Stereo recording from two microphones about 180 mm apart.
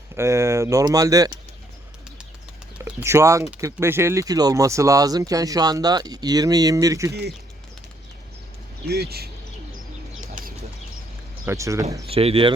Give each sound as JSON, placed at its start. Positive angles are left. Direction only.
{"t": 0.2, "sound": "speech", "side_deg": -15}
{"t": 2.7, "sound": "speech", "side_deg": -10}
{"t": 7.1, "sound": "speech", "side_deg": -65}
{"t": 8.9, "sound": "speech", "side_deg": -60}
{"t": 10.2, "sound": "bird", "side_deg": -45}
{"t": 11.4, "sound": "speech", "side_deg": -15}
{"t": 12.0, "sound": "speech", "side_deg": -30}